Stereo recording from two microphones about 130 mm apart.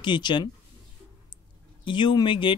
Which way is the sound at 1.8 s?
35° left (ahead or behind).